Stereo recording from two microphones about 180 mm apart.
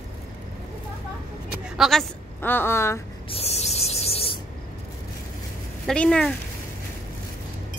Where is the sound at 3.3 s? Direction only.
35° left (ahead or behind).